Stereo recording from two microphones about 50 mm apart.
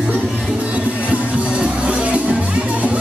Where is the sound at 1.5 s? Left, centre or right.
Right.